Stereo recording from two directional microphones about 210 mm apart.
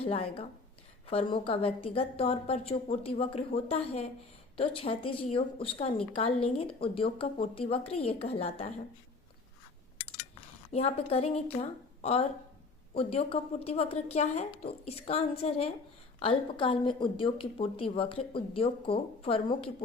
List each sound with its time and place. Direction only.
0.0 s a woman's voice: 30° left (ahead or behind)
10.7 s a woman's voice: 30° left (ahead or behind)